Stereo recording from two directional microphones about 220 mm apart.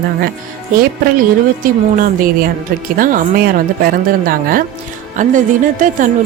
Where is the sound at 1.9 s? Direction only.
40° right (ahead or behind).